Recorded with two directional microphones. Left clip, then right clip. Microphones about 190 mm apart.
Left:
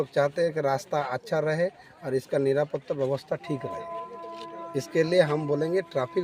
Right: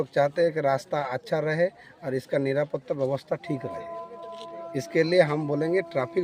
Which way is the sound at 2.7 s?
10° right (ahead or behind).